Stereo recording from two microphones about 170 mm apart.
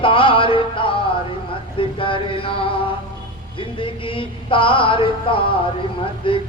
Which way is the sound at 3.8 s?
30° left (ahead or behind).